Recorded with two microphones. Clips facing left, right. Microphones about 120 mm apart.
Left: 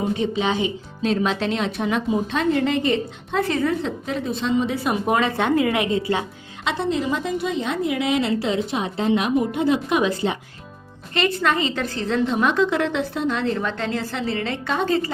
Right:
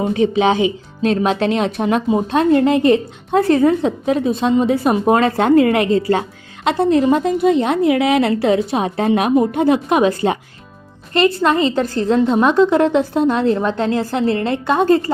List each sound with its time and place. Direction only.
0.1 s a woman's voice: 65° right (ahead or behind); by 10.3 s 50° right (ahead or behind)
11.1 s a woman's voice: 40° right (ahead or behind)